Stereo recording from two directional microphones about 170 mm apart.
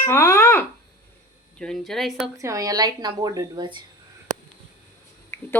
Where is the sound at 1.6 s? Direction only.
Centre (ahead or behind).